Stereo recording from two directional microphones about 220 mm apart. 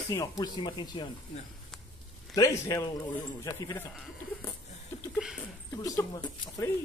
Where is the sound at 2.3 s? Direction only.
15° left (ahead or behind).